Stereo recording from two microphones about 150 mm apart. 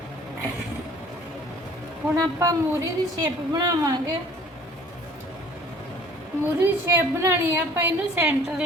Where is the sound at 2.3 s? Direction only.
20° right (ahead or behind).